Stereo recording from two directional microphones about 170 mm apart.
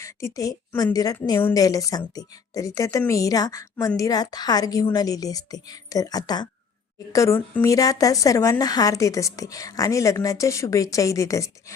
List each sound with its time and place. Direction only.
0.0 s a woman's voice: 15° left (ahead or behind)